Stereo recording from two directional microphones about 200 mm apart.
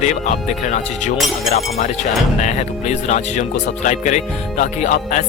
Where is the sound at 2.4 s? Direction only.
35° left (ahead or behind).